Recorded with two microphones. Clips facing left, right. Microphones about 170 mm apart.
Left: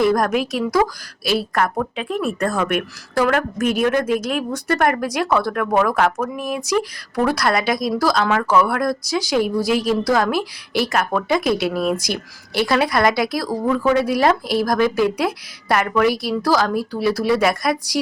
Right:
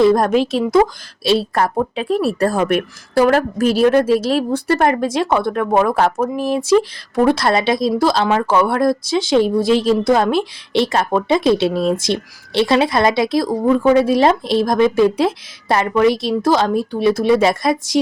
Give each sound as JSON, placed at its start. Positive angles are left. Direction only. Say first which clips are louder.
{"t": 0.0, "sound": "speech", "louder": "right 4 dB", "side_deg": -25}